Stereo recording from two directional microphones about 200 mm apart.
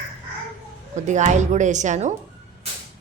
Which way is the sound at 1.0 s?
35° right (ahead or behind).